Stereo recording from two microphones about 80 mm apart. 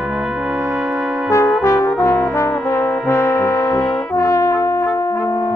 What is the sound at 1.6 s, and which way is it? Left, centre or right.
Brass instrument, left.